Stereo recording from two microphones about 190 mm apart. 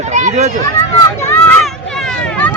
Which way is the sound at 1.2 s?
10° left (ahead or behind).